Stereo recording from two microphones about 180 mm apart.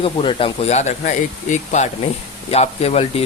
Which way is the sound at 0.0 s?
30° left (ahead or behind).